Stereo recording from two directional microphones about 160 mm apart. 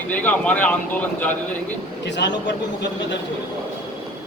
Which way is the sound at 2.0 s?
90° left.